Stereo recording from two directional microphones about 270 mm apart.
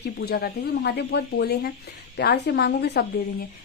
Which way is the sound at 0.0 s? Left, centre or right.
Left.